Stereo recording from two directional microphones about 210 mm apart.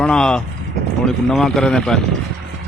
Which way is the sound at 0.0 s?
5° left (ahead or behind).